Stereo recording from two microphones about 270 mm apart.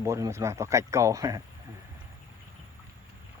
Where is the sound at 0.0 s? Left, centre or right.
Centre.